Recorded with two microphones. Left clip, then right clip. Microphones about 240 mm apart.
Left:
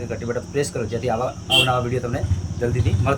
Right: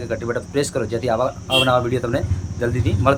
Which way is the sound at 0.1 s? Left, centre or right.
Centre.